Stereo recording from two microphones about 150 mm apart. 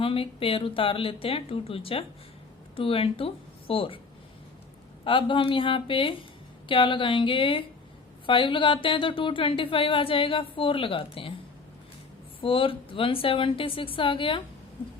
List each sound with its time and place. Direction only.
0.0 s speech: 40° left (ahead or behind)
5.0 s speech: 35° left (ahead or behind)
12.4 s speech: 35° left (ahead or behind)